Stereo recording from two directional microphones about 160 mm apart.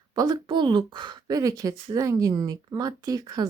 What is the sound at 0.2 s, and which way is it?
Speech, 25° right (ahead or behind).